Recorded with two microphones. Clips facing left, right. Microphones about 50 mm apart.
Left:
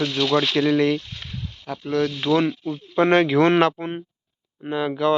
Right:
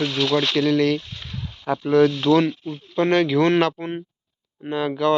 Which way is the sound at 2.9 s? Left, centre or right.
Left.